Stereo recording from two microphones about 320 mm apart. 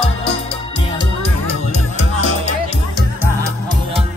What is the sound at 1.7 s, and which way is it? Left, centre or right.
Music, left.